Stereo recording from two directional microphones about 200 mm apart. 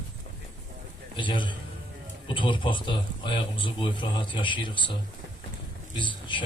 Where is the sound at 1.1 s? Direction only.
25° left (ahead or behind).